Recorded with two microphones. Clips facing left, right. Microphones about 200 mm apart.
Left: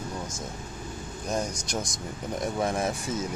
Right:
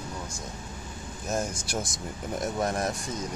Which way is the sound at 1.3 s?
5° right (ahead or behind).